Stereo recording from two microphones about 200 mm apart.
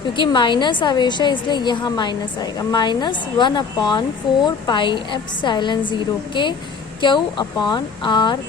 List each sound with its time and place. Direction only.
0.2 s a woman's voice: 20° left (ahead or behind)